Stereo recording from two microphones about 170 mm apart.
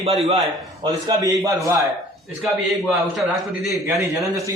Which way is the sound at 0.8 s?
20° right (ahead or behind).